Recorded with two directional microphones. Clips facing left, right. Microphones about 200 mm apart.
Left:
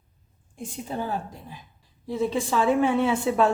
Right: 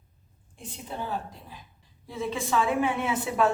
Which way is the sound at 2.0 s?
35° left (ahead or behind).